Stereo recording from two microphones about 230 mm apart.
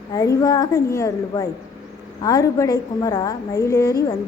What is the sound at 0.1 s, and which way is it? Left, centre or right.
A woman's voice, centre.